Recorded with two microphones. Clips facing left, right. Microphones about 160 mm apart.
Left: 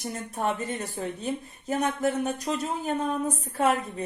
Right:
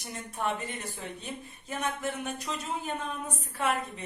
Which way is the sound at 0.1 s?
40° left (ahead or behind).